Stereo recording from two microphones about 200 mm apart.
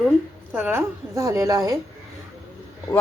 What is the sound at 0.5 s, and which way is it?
A woman's voice, 10° right (ahead or behind).